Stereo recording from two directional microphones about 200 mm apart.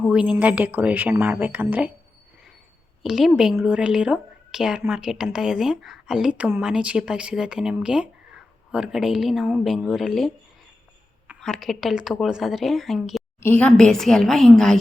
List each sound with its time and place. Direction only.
0.1 s speech: 5° right (ahead or behind)
3.0 s a woman's voice: centre (ahead or behind)